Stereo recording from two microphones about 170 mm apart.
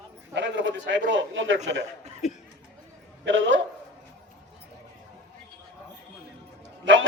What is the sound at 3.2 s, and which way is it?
Speech, 90° right.